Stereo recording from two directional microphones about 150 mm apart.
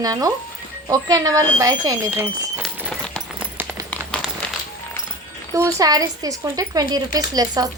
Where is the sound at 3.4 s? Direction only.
15° right (ahead or behind).